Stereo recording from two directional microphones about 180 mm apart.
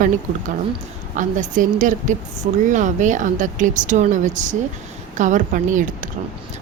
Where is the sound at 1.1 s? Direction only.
45° right (ahead or behind).